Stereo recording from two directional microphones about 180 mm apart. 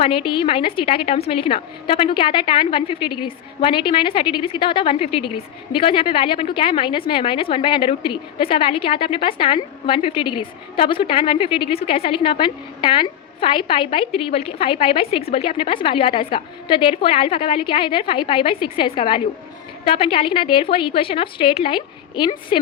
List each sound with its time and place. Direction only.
0.0 s a woman's voice: 30° left (ahead or behind)